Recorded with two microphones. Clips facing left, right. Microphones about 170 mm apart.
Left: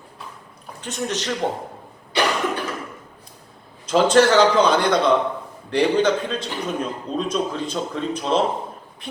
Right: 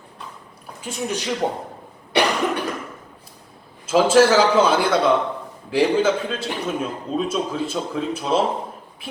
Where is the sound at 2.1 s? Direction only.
65° right (ahead or behind).